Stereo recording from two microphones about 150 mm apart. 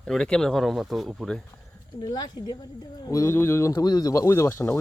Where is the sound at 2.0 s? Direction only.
25° left (ahead or behind).